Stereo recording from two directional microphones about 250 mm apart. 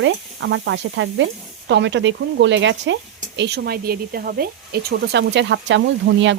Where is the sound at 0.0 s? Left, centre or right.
Right.